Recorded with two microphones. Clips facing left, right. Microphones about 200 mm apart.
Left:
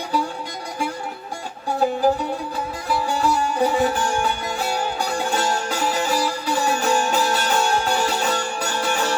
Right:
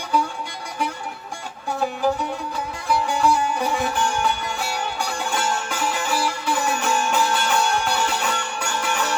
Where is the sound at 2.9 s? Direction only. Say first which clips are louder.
Right 2 dB; 40° left (ahead or behind).